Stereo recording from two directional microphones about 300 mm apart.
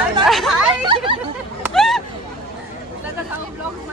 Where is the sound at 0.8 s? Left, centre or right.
Centre.